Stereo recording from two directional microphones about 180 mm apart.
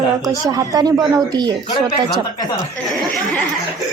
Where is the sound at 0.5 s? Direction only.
20° right (ahead or behind).